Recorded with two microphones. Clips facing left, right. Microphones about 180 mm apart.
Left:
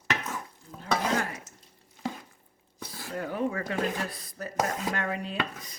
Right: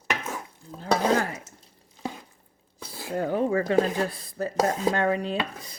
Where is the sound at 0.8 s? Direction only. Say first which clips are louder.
Right 5 dB; 35° right (ahead or behind).